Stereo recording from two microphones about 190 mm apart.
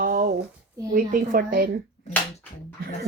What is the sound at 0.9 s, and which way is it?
Speech, 50° right (ahead or behind).